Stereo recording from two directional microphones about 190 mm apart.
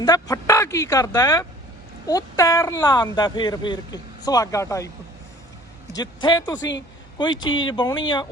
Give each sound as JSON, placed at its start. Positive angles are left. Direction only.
{"t": 0.0, "sound": "speech", "side_deg": 20}
{"t": 5.9, "sound": "speech", "side_deg": 20}
{"t": 6.6, "sound": "a woman's voice", "side_deg": 70}
{"t": 7.2, "sound": "speech", "side_deg": 25}